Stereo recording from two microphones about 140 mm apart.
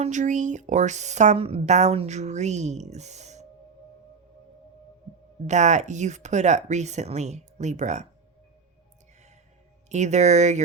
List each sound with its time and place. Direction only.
0.0 s speech: 60° right (ahead or behind)
5.5 s speech: 55° right (ahead or behind)
9.9 s speech: 55° right (ahead or behind)